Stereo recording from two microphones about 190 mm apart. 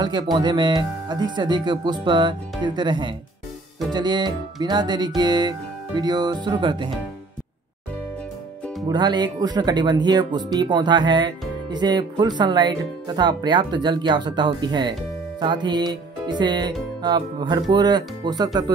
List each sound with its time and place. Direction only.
0.0 s speech: 25° right (ahead or behind)
8.8 s speech: 20° right (ahead or behind)